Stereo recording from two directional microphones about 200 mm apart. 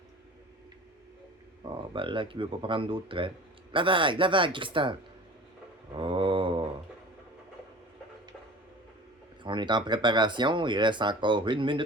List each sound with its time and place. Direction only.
1.6 s speech: 25° right (ahead or behind)
5.9 s mantra: 25° right (ahead or behind)
9.4 s speech: 25° right (ahead or behind)